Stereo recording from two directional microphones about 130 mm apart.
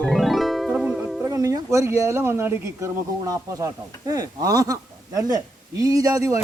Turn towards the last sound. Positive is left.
turn(degrees=-25)  # may be behind; listen again after turning